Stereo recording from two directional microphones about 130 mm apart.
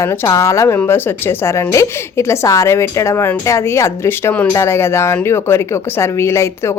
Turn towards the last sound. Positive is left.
turn(degrees=20)  # may be behind; listen again after turning